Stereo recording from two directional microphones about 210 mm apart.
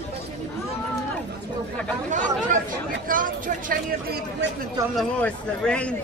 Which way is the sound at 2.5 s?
40° right (ahead or behind).